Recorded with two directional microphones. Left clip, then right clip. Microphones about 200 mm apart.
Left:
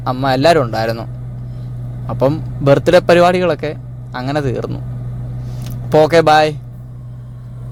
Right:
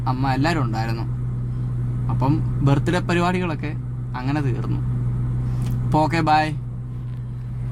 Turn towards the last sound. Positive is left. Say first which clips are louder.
# left 9 dB
turn(degrees=30)  # may be behind; listen again after turning